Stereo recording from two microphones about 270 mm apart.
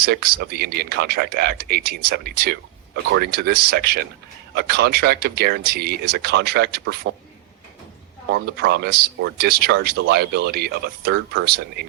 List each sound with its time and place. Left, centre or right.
0.0 s speech: right
8.3 s speech: right